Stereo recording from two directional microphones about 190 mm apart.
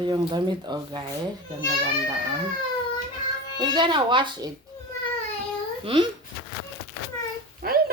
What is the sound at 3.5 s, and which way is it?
Speech, 25° right (ahead or behind).